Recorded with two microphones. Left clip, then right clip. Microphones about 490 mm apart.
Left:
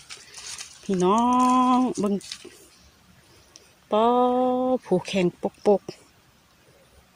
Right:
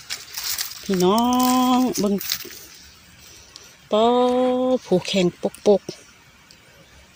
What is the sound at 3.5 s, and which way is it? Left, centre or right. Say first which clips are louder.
Speech: right 3 dB; left.